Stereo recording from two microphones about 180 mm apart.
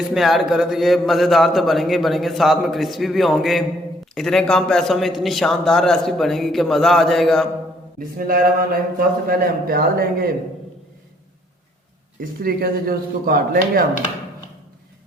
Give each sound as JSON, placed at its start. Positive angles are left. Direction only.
{"t": 0.1, "sound": "a man's voice", "side_deg": 0}
{"t": 7.9, "sound": "a man's voice", "side_deg": -50}
{"t": 12.2, "sound": "a man's voice", "side_deg": -55}